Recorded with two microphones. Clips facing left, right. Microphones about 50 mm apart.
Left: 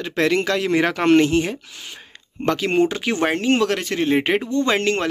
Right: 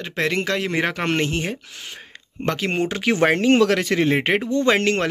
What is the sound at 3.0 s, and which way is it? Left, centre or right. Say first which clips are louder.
Speech: right 3 dB; right.